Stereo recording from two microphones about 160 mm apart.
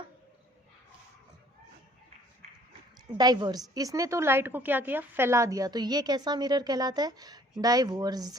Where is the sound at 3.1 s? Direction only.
25° right (ahead or behind).